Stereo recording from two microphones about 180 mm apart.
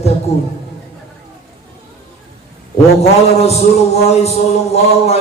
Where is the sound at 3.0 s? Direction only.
35° left (ahead or behind).